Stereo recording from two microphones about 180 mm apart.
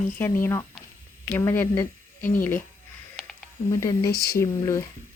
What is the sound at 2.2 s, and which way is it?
Speech, 50° left (ahead or behind).